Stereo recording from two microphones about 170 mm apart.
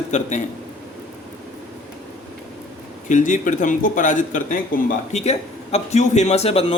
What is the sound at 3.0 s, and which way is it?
A man's voice, 50° left (ahead or behind).